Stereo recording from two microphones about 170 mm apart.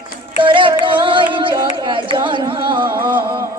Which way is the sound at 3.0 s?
10° right (ahead or behind).